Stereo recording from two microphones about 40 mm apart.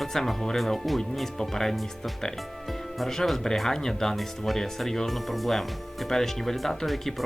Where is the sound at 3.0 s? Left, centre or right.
Centre.